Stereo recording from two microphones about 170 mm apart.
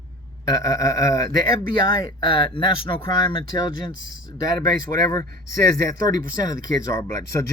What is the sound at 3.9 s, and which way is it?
Speech, 90° left.